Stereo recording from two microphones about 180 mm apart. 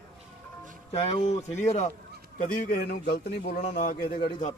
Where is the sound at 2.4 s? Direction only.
50° left (ahead or behind).